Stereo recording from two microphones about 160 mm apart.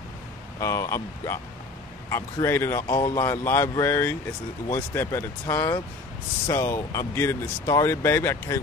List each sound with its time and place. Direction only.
0.6 s speech: 20° left (ahead or behind)
2.4 s speech: 15° left (ahead or behind)